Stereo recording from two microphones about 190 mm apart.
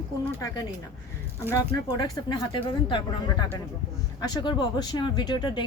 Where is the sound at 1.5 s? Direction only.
20° left (ahead or behind).